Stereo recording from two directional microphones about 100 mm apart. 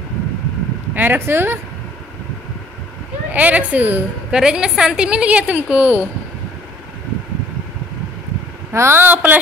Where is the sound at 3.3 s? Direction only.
15° right (ahead or behind).